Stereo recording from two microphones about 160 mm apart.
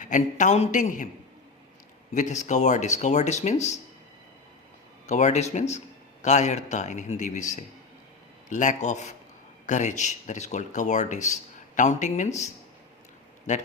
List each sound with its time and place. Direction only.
0.0 s speech: 50° left (ahead or behind)
2.1 s speech: 50° left (ahead or behind)
5.0 s speech: 45° left (ahead or behind)